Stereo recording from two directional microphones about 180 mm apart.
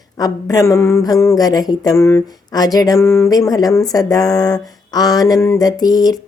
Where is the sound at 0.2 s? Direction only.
20° left (ahead or behind).